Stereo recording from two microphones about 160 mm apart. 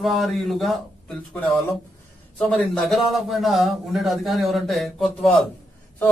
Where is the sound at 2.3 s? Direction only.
5° left (ahead or behind).